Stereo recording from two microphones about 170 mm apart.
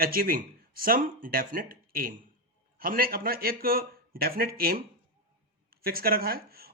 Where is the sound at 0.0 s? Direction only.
60° right (ahead or behind).